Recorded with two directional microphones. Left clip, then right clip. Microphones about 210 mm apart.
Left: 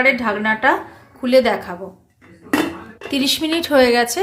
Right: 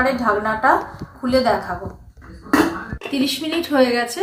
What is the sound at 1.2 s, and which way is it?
Speech, 90° left.